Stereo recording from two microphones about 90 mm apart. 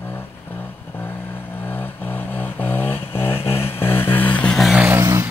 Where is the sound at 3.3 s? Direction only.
90° left.